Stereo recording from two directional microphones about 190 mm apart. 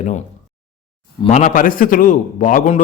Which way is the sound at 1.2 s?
40° left (ahead or behind).